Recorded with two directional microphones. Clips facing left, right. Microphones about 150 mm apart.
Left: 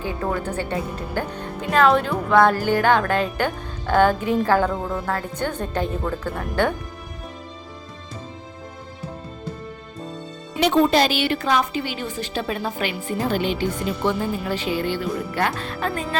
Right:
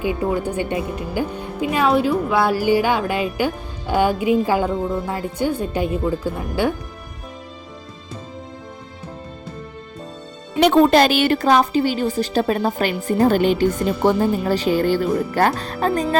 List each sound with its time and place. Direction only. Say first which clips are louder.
0.0 s a woman's voice: right 4 dB; 15° right (ahead or behind)
10.6 s a woman's voice: right 4 dB; 55° right (ahead or behind); by 15.9 s 35° right (ahead or behind)